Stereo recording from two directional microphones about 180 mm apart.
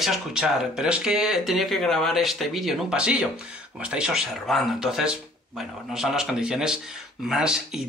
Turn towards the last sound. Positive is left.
turn(degrees=-5)  # may be behind; listen again after turning